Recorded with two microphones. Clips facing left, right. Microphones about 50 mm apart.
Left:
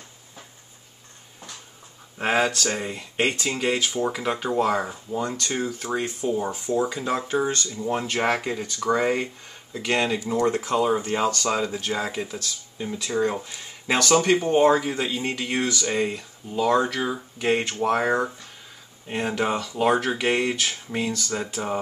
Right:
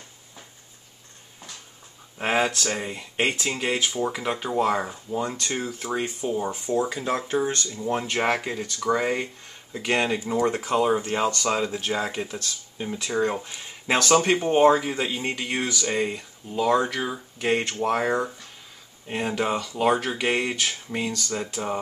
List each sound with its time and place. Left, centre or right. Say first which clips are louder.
2.1 s speech: left 1 dB; centre
5.2 s speech: left 3 dB; centre
5.9 s speech: left 1 dB; centre
6.4 s speech: left 1 dB; centre